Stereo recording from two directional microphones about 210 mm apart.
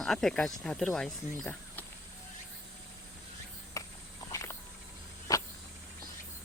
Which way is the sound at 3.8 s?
15° left (ahead or behind).